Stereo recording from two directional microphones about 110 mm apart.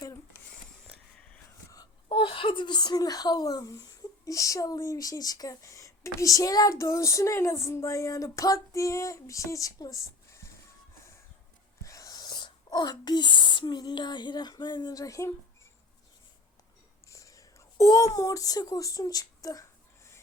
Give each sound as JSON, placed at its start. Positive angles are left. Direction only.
{"t": 2.0, "sound": "speech", "side_deg": 55}
{"t": 11.8, "sound": "speech", "side_deg": 30}
{"t": 17.1, "sound": "speech", "side_deg": 30}